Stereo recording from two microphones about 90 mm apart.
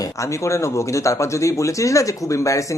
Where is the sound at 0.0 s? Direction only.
35° left (ahead or behind).